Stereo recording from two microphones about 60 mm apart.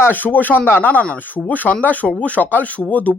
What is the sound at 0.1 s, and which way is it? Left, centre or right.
Speech, left.